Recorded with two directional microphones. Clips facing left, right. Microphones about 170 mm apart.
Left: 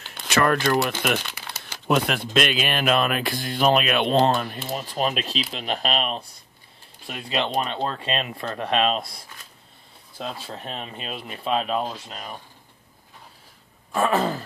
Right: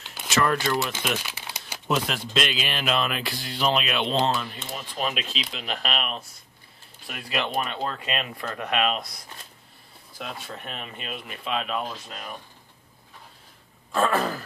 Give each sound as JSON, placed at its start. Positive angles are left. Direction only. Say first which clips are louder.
{"t": 0.0, "sound": "a sound", "louder": "even", "side_deg": -5}
{"t": 0.3, "sound": "speech", "louder": "left 3 dB", "side_deg": 55}
{"t": 1.2, "sound": "crumpling", "louder": "left 1 dB", "side_deg": -10}
{"t": 1.9, "sound": "speech", "louder": "left 4 dB", "side_deg": 60}
{"t": 4.6, "sound": "speech", "louder": "left 5 dB", "side_deg": 35}
{"t": 13.9, "sound": "speech", "louder": "left 2 dB", "side_deg": 20}